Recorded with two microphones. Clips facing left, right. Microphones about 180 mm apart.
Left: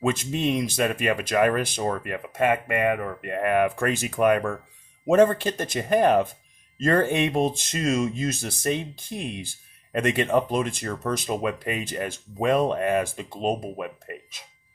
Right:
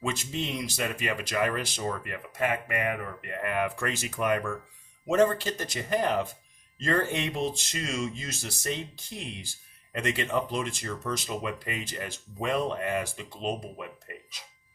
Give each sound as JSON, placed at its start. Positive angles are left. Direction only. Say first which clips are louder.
{"t": 0.0, "sound": "speech", "louder": "left 8 dB", "side_deg": 55}